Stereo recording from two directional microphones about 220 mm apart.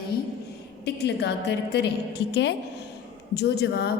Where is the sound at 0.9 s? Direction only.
50° left (ahead or behind).